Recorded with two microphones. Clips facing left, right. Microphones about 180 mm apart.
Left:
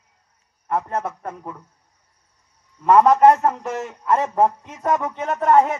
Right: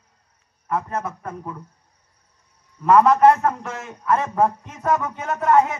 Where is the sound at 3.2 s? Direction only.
15° left (ahead or behind).